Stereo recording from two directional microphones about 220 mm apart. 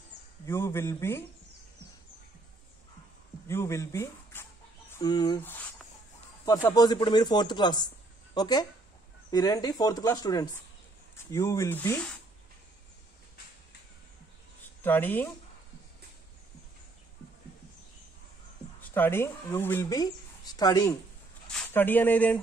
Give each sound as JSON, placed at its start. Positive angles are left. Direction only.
{"t": 0.5, "sound": "speech", "side_deg": 10}
{"t": 3.4, "sound": "speech", "side_deg": 10}
{"t": 14.6, "sound": "a sound", "side_deg": 10}
{"t": 18.8, "sound": "speech", "side_deg": 10}